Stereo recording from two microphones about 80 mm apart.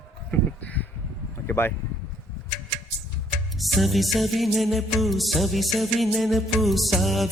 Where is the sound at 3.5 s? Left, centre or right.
Centre.